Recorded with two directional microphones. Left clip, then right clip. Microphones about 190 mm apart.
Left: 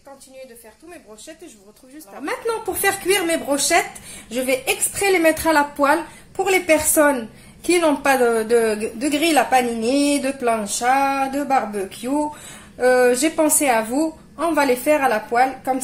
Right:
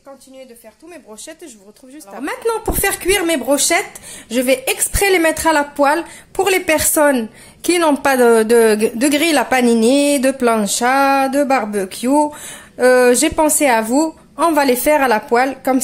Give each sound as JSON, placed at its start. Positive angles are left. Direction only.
{"t": 2.1, "sound": "speech", "side_deg": -35}
{"t": 2.8, "sound": "speech", "side_deg": -55}